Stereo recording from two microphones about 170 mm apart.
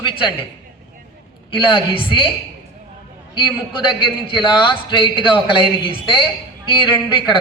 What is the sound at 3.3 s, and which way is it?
A man's voice, 30° left (ahead or behind).